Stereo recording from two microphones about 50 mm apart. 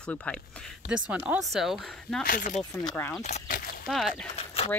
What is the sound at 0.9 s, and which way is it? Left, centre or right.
Speech, right.